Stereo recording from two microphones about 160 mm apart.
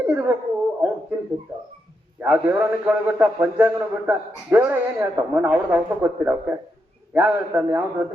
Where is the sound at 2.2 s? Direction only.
10° right (ahead or behind).